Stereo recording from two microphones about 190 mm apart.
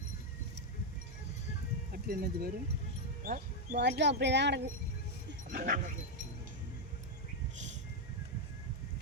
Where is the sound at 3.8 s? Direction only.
65° right (ahead or behind).